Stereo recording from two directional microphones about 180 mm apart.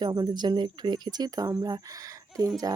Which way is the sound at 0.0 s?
25° right (ahead or behind).